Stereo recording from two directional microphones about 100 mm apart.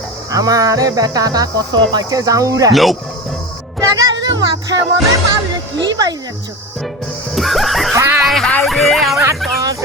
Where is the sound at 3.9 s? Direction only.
40° right (ahead or behind).